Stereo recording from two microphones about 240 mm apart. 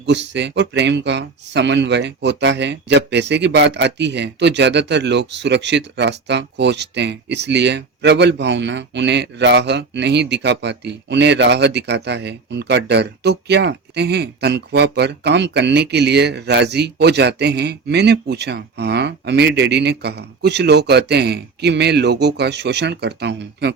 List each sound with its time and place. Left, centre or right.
0.0 s speech: right